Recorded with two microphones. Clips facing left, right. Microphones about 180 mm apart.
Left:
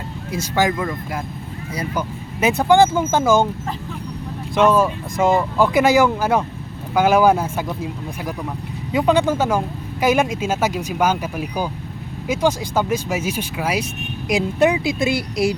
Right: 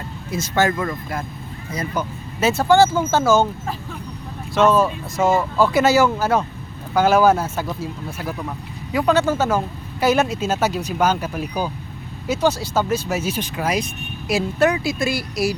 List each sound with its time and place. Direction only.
0.3 s speech: 10° left (ahead or behind)
4.5 s speech: 15° left (ahead or behind)